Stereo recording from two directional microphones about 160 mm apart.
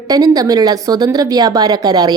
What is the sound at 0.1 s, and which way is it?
Speech, 25° right (ahead or behind).